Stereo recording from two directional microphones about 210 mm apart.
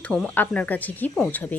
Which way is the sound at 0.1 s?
5° left (ahead or behind).